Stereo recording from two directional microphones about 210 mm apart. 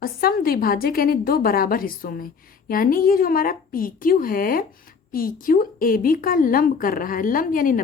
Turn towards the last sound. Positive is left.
turn(degrees=40)  # may be behind; listen again after turning